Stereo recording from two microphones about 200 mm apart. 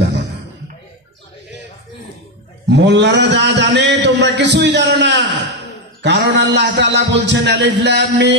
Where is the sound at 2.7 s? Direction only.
60° right (ahead or behind).